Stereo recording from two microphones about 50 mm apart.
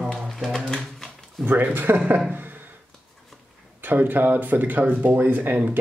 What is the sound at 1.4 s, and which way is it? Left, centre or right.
Speech, right.